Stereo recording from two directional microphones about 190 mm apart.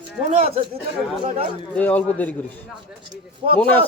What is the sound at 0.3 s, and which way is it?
A man's voice, 30° right (ahead or behind).